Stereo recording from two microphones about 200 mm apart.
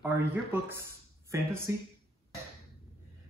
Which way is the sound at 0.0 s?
10° right (ahead or behind).